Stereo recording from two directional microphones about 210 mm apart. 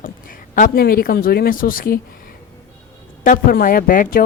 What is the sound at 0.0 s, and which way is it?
Speech, 40° left (ahead or behind).